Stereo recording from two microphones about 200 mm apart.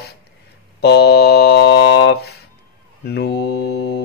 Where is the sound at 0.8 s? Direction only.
55° left (ahead or behind).